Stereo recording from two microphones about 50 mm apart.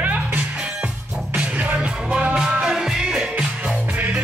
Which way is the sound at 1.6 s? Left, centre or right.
Right.